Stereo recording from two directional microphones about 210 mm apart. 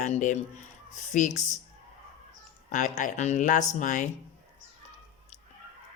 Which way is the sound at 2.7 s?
35° left (ahead or behind).